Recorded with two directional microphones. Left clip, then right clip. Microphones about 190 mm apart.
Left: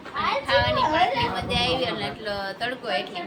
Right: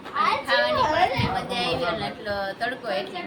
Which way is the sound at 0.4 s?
10° right (ahead or behind).